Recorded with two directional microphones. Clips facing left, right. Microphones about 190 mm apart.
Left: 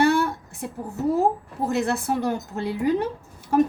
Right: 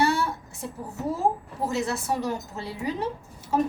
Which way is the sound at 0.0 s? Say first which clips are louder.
Left 4 dB; 55° left (ahead or behind).